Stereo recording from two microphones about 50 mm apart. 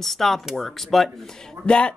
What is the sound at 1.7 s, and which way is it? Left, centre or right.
Speech, left.